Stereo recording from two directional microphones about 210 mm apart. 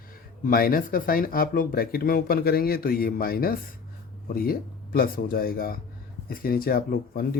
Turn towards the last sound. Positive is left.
turn(degrees=45)  # may be behind; listen again after turning